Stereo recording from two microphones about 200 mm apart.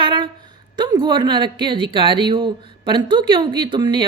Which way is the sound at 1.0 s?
25° right (ahead or behind).